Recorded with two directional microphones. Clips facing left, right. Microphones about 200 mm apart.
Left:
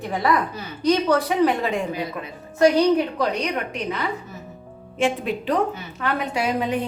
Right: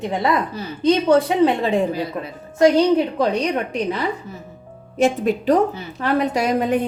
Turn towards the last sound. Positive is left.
turn(degrees=-45)  # may be behind; listen again after turning